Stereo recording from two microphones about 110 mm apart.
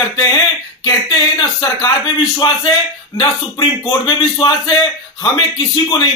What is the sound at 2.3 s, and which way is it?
A man's voice, 35° left (ahead or behind).